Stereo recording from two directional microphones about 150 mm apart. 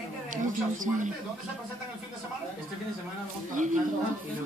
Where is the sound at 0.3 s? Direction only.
60° right (ahead or behind).